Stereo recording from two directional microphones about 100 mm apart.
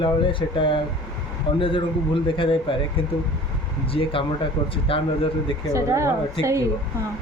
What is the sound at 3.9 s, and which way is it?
A man's voice, 65° left (ahead or behind).